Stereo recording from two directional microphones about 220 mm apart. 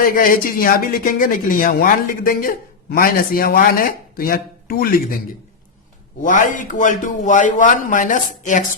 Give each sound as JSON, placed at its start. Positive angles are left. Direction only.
{"t": 0.0, "sound": "speech", "side_deg": 40}
{"t": 6.2, "sound": "speech", "side_deg": 35}